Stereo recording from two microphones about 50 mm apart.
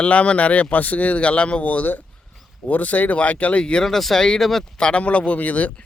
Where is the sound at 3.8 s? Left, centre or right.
Centre.